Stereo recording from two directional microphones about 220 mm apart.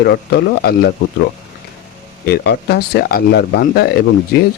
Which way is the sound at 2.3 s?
50° left (ahead or behind).